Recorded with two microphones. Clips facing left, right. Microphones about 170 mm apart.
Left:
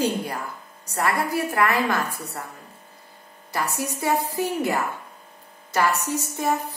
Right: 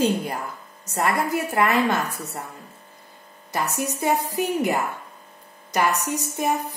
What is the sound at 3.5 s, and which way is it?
A woman's voice, 20° right (ahead or behind).